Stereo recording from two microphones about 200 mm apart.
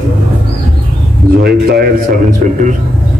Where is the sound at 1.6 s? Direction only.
50° right (ahead or behind).